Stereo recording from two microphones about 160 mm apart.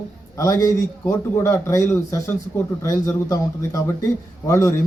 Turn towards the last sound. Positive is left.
turn(degrees=20)  # may be behind; listen again after turning